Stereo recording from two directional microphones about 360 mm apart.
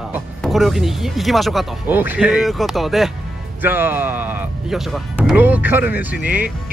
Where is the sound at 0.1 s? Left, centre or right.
Centre.